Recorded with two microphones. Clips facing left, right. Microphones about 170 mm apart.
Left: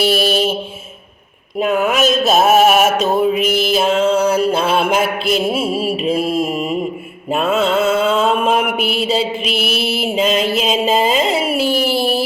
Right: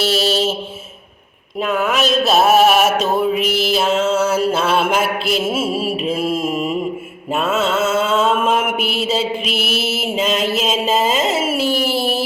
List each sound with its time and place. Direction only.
0.0 s mantra: 10° left (ahead or behind)
1.5 s mantra: 15° left (ahead or behind)
2.0 s mantra: 45° left (ahead or behind)
2.6 s mantra: 5° left (ahead or behind)
3.4 s mantra: 50° left (ahead or behind)
3.7 s mantra: 5° right (ahead or behind)